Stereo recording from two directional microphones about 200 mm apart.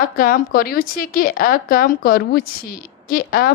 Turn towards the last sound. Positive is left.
turn(degrees=50)  # may be behind; listen again after turning